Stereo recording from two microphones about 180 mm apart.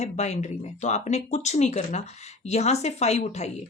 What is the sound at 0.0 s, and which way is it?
A woman's voice, 40° left (ahead or behind).